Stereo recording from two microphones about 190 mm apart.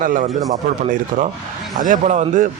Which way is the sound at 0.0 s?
45° right (ahead or behind).